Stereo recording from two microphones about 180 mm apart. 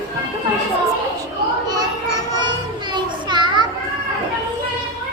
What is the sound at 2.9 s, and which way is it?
Children playing, 25° right (ahead or behind).